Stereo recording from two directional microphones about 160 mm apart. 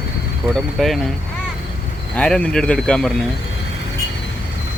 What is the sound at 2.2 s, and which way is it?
Speech, 5° left (ahead or behind).